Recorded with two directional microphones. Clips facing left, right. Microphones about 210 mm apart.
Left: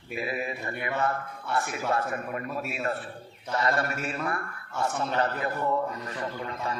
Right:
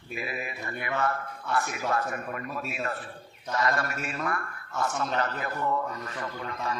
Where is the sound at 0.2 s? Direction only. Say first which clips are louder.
Left 4 dB; 25° left (ahead or behind).